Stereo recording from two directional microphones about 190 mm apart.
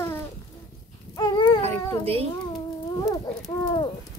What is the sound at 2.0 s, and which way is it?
Speech, 30° right (ahead or behind).